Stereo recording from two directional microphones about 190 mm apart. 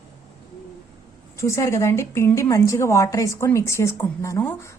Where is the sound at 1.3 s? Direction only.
15° left (ahead or behind).